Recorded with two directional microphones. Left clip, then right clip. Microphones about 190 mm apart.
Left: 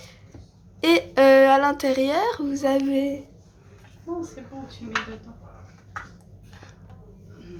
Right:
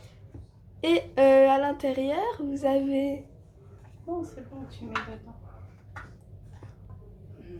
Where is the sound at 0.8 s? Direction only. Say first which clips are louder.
Left 5 dB; 35° left (ahead or behind).